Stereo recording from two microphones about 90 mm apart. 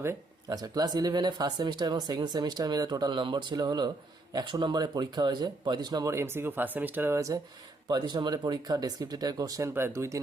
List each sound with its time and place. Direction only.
0.4 s speech: 45° right (ahead or behind)
6.1 s speech: 30° right (ahead or behind)
7.9 s speech: 55° right (ahead or behind); by 10.2 s 30° right (ahead or behind)